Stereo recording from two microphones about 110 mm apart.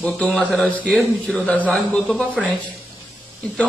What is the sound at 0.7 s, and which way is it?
A man's voice, 15° left (ahead or behind).